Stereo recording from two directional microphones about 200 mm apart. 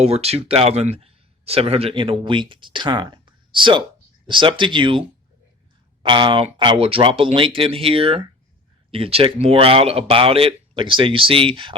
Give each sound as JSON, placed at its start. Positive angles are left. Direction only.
{"t": 0.0, "sound": "a man's voice", "side_deg": -30}